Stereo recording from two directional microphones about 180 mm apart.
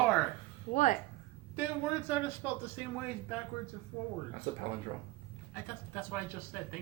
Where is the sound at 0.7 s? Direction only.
40° left (ahead or behind).